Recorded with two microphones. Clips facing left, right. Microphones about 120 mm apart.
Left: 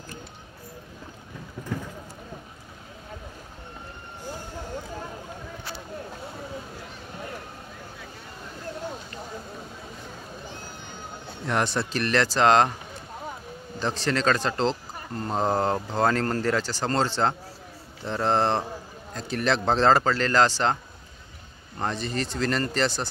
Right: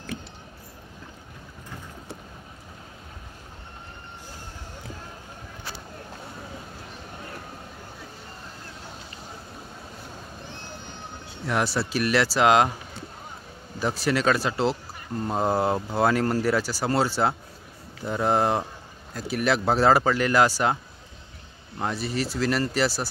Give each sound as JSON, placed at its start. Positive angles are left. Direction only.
{"t": 11.4, "sound": "speech", "side_deg": -5}
{"t": 13.7, "sound": "speech", "side_deg": -10}
{"t": 21.7, "sound": "speech", "side_deg": -5}